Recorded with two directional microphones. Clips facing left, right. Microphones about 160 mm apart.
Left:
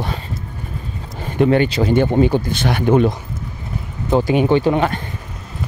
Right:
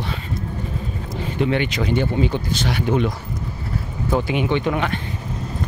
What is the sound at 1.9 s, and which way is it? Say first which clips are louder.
Speech: left 6 dB; 50° left (ahead or behind).